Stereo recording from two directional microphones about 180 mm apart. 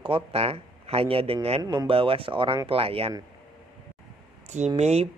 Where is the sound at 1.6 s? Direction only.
20° right (ahead or behind).